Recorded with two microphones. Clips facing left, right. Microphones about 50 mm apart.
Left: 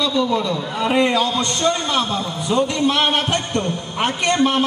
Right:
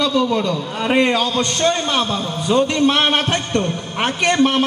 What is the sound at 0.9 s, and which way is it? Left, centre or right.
Speech, right.